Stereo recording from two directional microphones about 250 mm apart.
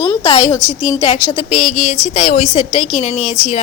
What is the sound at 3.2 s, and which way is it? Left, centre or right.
Speech, centre.